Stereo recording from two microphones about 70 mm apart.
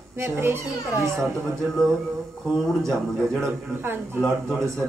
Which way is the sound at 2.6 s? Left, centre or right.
Centre.